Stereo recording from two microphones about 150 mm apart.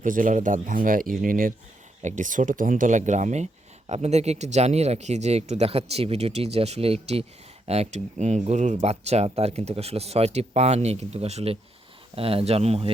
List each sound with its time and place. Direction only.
0.0 s speech: 60° right (ahead or behind)
2.0 s speech: 55° right (ahead or behind)